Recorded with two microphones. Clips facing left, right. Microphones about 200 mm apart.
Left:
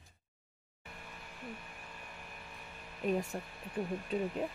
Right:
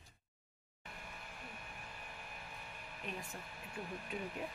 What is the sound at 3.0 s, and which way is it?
Speech, 50° left (ahead or behind).